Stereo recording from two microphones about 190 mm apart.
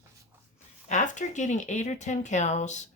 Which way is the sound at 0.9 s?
40° left (ahead or behind).